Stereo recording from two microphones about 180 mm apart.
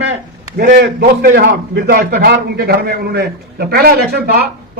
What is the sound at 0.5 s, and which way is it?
A man's voice, 60° right (ahead or behind).